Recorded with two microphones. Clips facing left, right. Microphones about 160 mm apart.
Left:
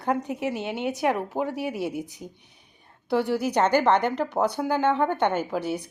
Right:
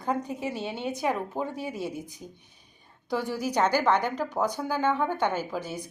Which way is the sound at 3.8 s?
10° right (ahead or behind).